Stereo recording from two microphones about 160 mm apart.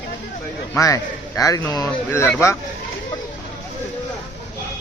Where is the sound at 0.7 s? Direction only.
20° left (ahead or behind).